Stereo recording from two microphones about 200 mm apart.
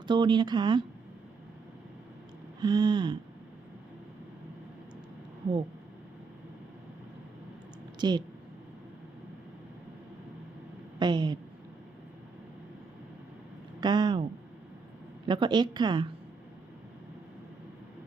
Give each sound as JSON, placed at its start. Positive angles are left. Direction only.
{"t": 0.1, "sound": "a woman's voice", "side_deg": -20}
{"t": 2.6, "sound": "a woman's voice", "side_deg": -20}
{"t": 7.9, "sound": "a woman's voice", "side_deg": -20}
{"t": 11.0, "sound": "a woman's voice", "side_deg": -20}
{"t": 13.8, "sound": "a woman's voice", "side_deg": -20}
{"t": 15.3, "sound": "a woman's voice", "side_deg": -20}